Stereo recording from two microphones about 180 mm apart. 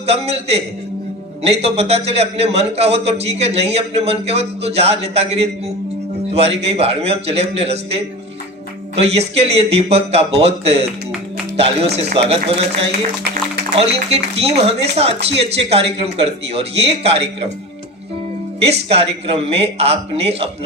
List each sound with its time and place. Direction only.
0.0 s a man's voice: 35° right (ahead or behind)
13.7 s a man's voice: 35° right (ahead or behind)
18.6 s a man's voice: 35° right (ahead or behind)